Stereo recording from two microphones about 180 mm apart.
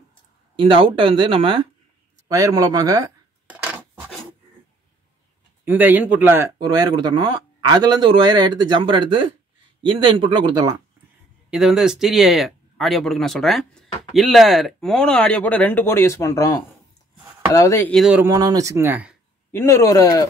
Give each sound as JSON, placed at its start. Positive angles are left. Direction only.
{"t": 0.6, "sound": "a man's voice", "side_deg": -25}
{"t": 3.4, "sound": "a sound", "side_deg": -10}
{"t": 5.7, "sound": "speech", "side_deg": -10}
{"t": 6.6, "sound": "a man's voice", "side_deg": -20}
{"t": 11.5, "sound": "speech", "side_deg": -5}
{"t": 17.9, "sound": "speech", "side_deg": -5}
{"t": 18.3, "sound": "speech", "side_deg": -20}
{"t": 19.5, "sound": "a man's voice", "side_deg": 15}